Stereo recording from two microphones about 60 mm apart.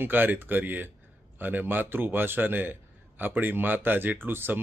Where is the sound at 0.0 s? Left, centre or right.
Right.